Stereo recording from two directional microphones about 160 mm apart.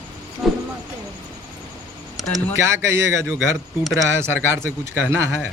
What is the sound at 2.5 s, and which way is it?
Speech, 15° right (ahead or behind).